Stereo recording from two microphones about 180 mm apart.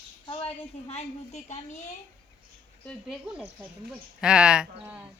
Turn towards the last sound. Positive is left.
turn(degrees=-10)  # may be behind; listen again after turning